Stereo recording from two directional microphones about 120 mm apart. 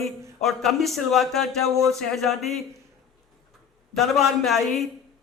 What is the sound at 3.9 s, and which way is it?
Speech, centre (ahead or behind).